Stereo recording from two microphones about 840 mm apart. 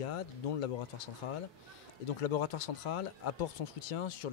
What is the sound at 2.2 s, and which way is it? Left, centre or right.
Speech, left.